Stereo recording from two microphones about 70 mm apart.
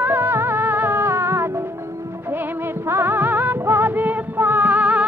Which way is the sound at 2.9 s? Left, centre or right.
Right.